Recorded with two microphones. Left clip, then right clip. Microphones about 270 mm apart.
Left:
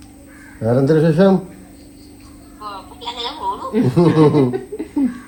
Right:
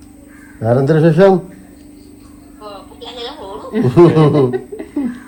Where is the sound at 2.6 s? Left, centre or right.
Centre.